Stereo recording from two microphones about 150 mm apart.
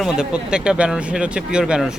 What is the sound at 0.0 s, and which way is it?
Speech, 5° right (ahead or behind).